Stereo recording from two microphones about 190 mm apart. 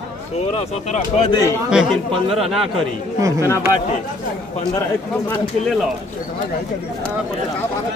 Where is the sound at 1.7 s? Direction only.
Centre (ahead or behind).